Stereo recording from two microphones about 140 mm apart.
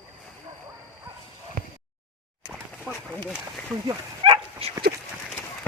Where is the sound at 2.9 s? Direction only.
5° left (ahead or behind).